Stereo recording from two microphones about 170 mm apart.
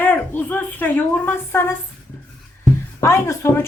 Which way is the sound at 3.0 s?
15° left (ahead or behind).